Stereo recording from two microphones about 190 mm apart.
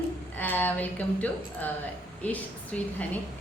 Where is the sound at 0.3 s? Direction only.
10° left (ahead or behind).